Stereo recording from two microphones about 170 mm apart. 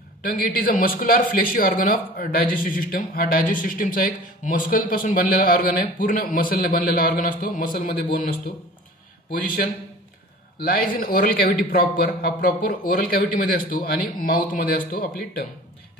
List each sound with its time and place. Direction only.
0.2 s speech: 55° left (ahead or behind)
10.6 s speech: 60° left (ahead or behind)